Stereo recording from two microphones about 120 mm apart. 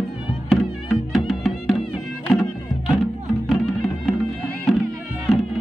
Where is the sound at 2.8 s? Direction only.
Centre (ahead or behind).